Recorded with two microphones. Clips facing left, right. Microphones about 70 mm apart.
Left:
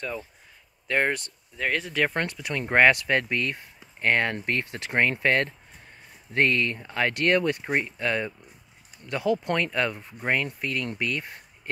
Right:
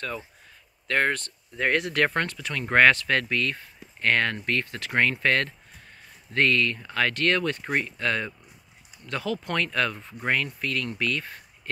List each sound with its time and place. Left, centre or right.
0.8 s speech: centre
1.6 s speech: centre
2.1 s speech: centre